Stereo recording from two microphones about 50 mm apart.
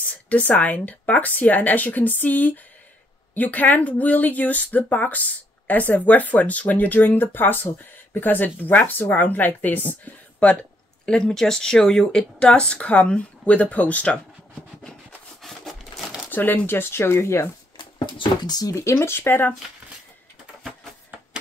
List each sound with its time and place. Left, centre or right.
0.3 s speech: left
11.1 s speech: centre
12.2 s a woman's voice: left
15.4 s a sound: centre
16.3 s speech: left
16.6 s speech: left
18.9 s speech: left